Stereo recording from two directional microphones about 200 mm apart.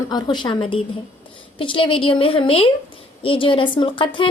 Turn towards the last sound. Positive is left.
turn(degrees=25)  # may be behind; listen again after turning